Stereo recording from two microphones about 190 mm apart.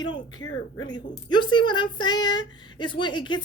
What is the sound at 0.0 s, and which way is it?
A woman's voice, 25° left (ahead or behind).